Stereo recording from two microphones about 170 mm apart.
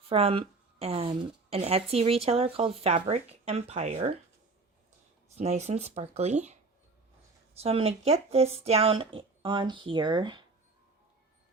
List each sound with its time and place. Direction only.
0.1 s speech: 35° right (ahead or behind)
5.4 s speech: 40° right (ahead or behind)
7.6 s speech: 35° right (ahead or behind)